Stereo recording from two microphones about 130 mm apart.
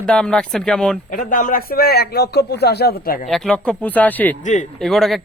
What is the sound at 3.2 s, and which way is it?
Speech, centre (ahead or behind).